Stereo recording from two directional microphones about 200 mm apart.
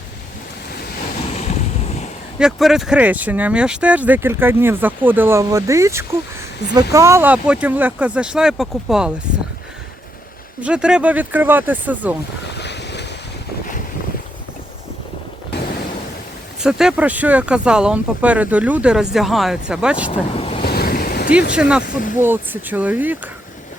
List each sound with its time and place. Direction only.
1.3 s waves: 35° left (ahead or behind)
2.4 s speech: centre (ahead or behind)
10.6 s speech: 5° right (ahead or behind)
12.5 s boat: 60° left (ahead or behind)
16.6 s speech: 5° right (ahead or behind)
20.1 s speech: 30° left (ahead or behind)
20.6 s boat: 50° left (ahead or behind)
21.5 s speech: 5° right (ahead or behind)
21.8 s speech: 45° left (ahead or behind)
22.2 s speech: 10° right (ahead or behind)